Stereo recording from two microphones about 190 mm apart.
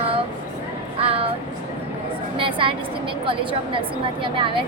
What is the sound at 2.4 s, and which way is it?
Vehicle, 25° right (ahead or behind).